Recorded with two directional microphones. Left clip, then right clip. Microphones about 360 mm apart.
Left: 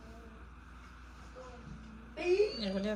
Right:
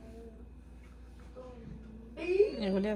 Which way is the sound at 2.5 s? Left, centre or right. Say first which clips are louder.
Right 4 dB; centre.